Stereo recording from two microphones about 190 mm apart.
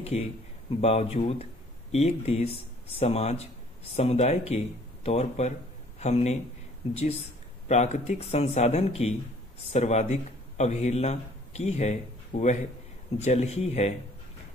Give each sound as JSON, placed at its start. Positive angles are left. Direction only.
{"t": 0.7, "sound": "a man's voice", "side_deg": 35}